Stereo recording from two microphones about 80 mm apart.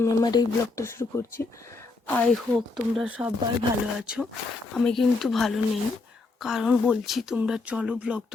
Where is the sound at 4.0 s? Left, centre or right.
Centre.